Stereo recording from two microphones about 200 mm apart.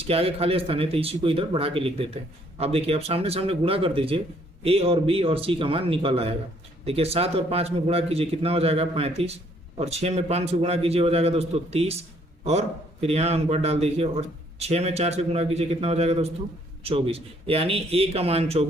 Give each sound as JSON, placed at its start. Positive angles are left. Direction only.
{"t": 0.0, "sound": "a man's voice", "side_deg": -30}